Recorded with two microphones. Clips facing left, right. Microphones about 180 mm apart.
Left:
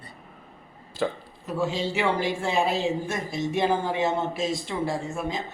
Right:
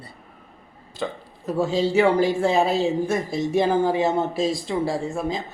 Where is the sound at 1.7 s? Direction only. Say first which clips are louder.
Right 9 dB; 40° right (ahead or behind).